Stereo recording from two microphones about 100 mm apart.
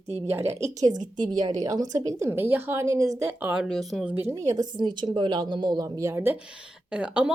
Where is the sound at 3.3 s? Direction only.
15° right (ahead or behind).